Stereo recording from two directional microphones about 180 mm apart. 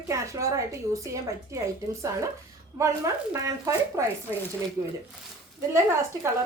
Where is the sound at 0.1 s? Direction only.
15° right (ahead or behind).